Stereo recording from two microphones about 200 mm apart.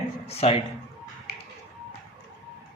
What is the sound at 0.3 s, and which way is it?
Speech, 30° left (ahead or behind).